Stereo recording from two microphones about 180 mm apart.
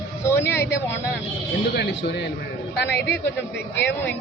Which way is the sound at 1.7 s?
75° left (ahead or behind).